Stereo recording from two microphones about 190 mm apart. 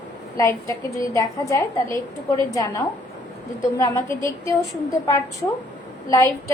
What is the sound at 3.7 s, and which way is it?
Speech, 15° left (ahead or behind).